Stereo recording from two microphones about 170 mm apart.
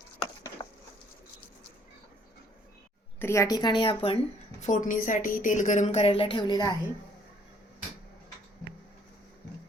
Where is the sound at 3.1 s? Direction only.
15° left (ahead or behind); by 4.2 s 30° left (ahead or behind).